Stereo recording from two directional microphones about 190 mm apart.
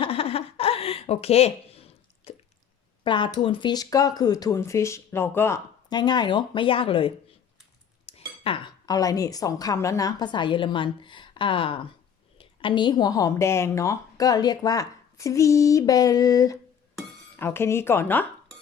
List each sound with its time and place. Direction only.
0.0 s a sound: 30° left (ahead or behind)
3.0 s a woman's voice: 25° left (ahead or behind)
5.9 s a woman's voice: 20° left (ahead or behind)